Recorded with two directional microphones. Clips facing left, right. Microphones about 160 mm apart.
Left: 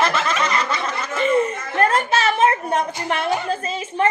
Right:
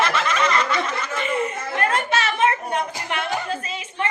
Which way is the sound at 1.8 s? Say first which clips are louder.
Left 4 dB; 40° left (ahead or behind).